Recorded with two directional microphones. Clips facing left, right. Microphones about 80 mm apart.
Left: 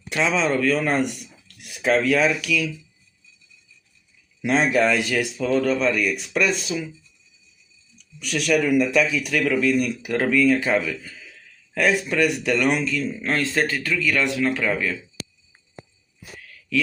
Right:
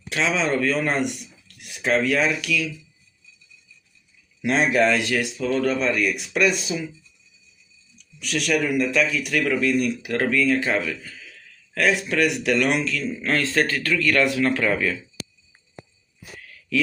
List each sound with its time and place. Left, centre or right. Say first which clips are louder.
0.1 s speech: left 1 dB; centre
4.4 s speech: even; centre
6.6 s speech: left 1 dB; centre
7.9 s a man's voice: even; centre
13.9 s speech: right 4 dB; centre
16.4 s a sound: even; centre